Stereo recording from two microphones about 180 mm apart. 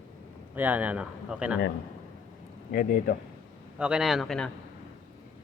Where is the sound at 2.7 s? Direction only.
55° left (ahead or behind).